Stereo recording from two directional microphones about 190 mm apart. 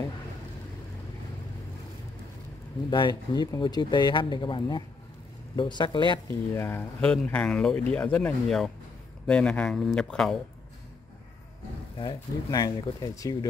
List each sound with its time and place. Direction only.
2.9 s speech: 25° left (ahead or behind)
6.2 s speech: 10° left (ahead or behind)
12.0 s speech: 20° left (ahead or behind)